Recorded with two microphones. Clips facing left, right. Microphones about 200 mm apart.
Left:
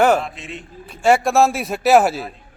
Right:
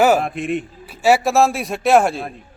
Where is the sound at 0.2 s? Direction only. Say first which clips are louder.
Right 8 dB; 55° right (ahead or behind).